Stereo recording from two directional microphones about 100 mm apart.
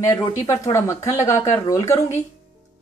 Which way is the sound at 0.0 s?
35° left (ahead or behind).